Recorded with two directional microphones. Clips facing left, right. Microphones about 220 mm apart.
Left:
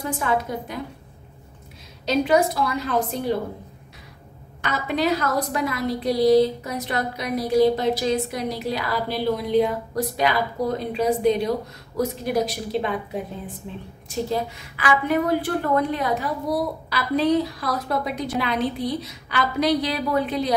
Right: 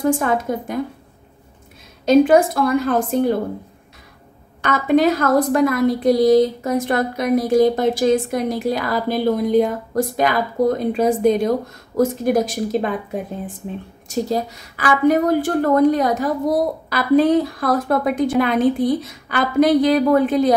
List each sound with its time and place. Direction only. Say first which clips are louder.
0.0 s a woman's voice: right 6 dB; 50° right (ahead or behind)
2.0 s a woman's voice: right 7 dB; 50° right (ahead or behind)
4.6 s a woman's voice: right 7 dB; 50° right (ahead or behind)